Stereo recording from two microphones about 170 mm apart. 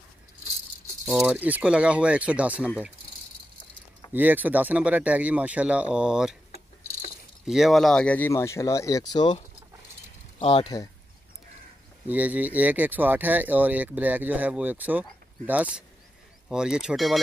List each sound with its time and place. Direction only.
1.0 s speech: 5° right (ahead or behind)
4.1 s speech: 10° right (ahead or behind)
7.4 s speech: centre (ahead or behind); by 9.4 s 25° left (ahead or behind)
10.4 s speech: 30° left (ahead or behind)
12.1 s speech: 10° right (ahead or behind)